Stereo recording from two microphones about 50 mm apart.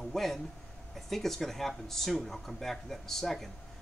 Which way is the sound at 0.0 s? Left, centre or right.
Centre.